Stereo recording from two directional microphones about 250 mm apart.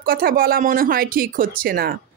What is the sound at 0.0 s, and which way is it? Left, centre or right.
Speech, right.